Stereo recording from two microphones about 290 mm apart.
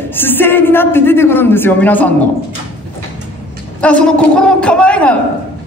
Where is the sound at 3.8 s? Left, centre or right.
Centre.